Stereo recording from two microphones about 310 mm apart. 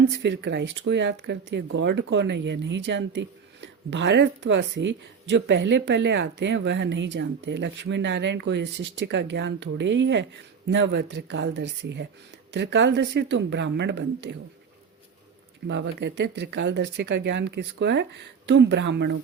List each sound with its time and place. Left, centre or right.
0.2 s speech: right
15.6 s speech: right